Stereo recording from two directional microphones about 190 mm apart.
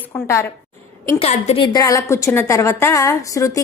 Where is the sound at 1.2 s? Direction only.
35° left (ahead or behind).